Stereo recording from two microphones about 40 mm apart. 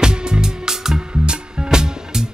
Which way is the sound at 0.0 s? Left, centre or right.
Centre.